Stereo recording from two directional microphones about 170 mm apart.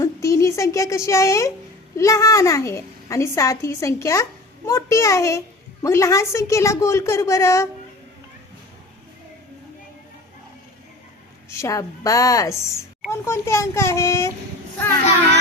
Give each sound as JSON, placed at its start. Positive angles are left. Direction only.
{"t": 0.0, "sound": "a sound", "side_deg": 20}
{"t": 2.0, "sound": "a woman's voice", "side_deg": 20}
{"t": 11.4, "sound": "a woman's voice", "side_deg": 15}